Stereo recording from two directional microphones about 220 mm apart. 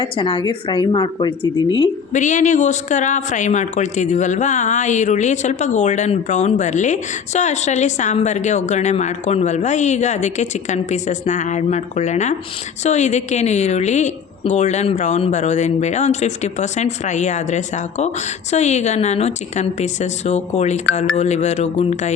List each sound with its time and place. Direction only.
0.0 s speech: 20° left (ahead or behind)
2.1 s speech: 35° left (ahead or behind)